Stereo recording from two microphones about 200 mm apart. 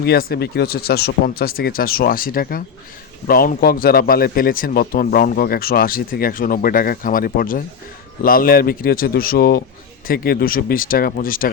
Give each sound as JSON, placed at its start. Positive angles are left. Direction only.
{"t": 0.0, "sound": "a man's voice", "side_deg": 50}